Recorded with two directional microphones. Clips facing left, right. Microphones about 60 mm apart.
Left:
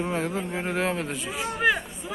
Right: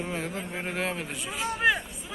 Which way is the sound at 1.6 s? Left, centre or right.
Centre.